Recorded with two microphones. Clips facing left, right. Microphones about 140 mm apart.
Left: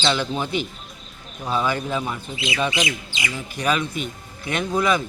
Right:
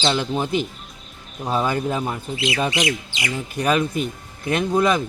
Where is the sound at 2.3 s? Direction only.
70° right (ahead or behind).